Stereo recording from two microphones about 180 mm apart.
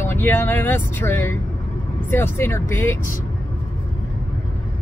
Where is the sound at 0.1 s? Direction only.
10° left (ahead or behind).